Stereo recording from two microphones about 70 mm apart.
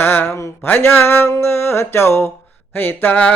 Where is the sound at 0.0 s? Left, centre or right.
Left.